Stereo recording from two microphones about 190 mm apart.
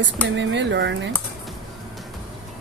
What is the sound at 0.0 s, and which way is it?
Speech, 70° right (ahead or behind).